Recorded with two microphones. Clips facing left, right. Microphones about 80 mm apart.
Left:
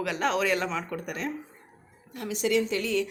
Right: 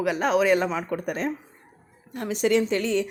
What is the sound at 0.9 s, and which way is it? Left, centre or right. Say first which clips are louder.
A woman's voice: right 5 dB; right.